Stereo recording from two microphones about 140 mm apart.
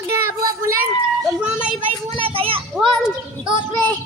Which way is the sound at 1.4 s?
10° right (ahead or behind).